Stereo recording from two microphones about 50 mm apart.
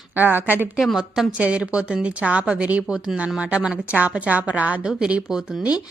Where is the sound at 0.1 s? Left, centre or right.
Right.